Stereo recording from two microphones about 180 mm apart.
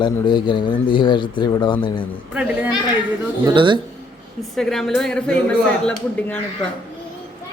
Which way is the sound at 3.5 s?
25° right (ahead or behind).